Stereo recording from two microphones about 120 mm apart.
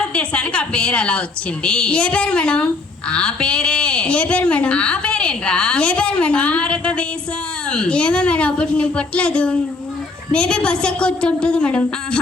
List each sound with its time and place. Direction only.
0.1 s a woman's voice: 10° left (ahead or behind)